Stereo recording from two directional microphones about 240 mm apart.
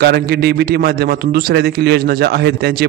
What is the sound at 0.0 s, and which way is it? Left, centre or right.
A man's voice, right.